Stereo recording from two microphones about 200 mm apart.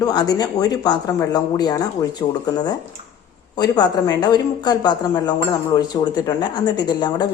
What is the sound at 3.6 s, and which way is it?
Speech, 20° left (ahead or behind).